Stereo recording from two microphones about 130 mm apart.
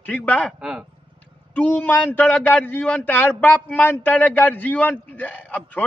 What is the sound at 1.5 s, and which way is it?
A man's voice, 15° left (ahead or behind).